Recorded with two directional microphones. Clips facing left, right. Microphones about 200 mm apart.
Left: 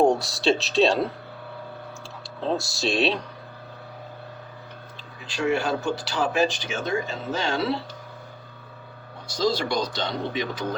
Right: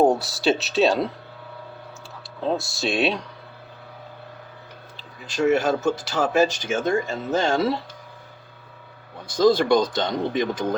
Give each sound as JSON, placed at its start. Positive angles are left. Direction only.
{"t": 0.0, "sound": "speech", "side_deg": -5}
{"t": 2.6, "sound": "speech", "side_deg": 0}
{"t": 4.9, "sound": "speech", "side_deg": -45}
{"t": 9.2, "sound": "speech", "side_deg": -50}